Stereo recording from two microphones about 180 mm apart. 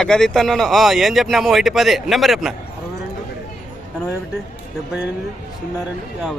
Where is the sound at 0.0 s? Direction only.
5° left (ahead or behind).